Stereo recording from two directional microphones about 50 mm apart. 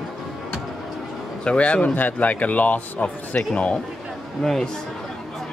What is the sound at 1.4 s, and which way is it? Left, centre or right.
Speech, left.